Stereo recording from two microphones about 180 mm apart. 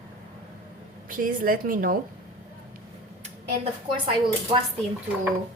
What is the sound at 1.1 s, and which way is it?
Speech, 50° right (ahead or behind).